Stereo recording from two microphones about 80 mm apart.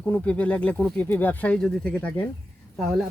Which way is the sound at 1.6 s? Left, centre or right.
Centre.